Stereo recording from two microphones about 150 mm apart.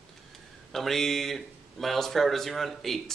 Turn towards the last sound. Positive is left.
turn(degrees=0)  # may be behind; listen again after turning